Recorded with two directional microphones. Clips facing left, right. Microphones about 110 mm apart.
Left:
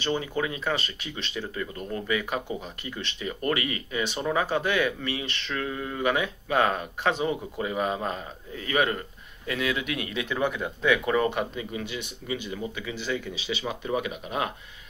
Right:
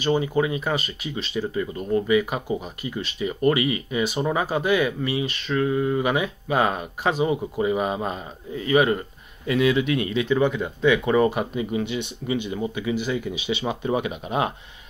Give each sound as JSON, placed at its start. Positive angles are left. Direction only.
{"t": 0.0, "sound": "speech", "side_deg": -15}
{"t": 11.7, "sound": "speech", "side_deg": -20}